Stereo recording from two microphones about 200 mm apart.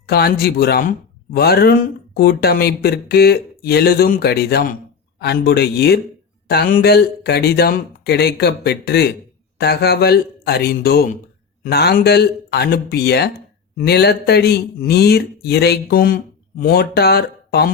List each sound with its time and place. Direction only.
0.0 s speech: 50° left (ahead or behind)